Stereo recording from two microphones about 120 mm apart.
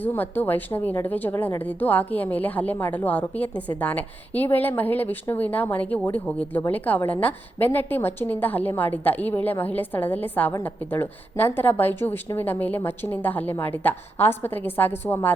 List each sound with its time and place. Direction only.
0.0 s a woman's voice: 15° left (ahead or behind)